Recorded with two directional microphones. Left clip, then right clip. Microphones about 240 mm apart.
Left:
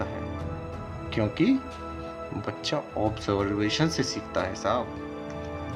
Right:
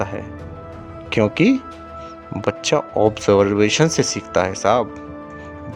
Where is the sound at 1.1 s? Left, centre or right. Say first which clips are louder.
Right 9 dB; right.